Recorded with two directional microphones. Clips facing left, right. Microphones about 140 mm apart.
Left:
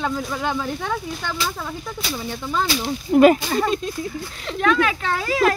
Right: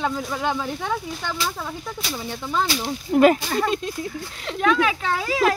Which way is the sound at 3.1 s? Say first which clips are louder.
Left 3 dB; 5° left (ahead or behind).